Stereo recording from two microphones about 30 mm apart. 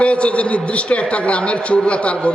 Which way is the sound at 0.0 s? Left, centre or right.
Left.